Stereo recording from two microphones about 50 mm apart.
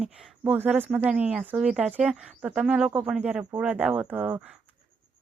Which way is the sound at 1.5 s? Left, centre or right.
Centre.